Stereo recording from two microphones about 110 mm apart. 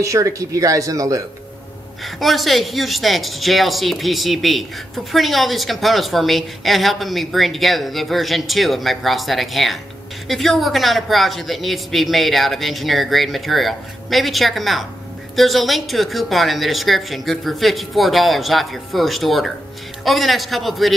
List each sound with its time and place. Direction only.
0.0 s speech: 30° right (ahead or behind)
2.0 s speech: centre (ahead or behind)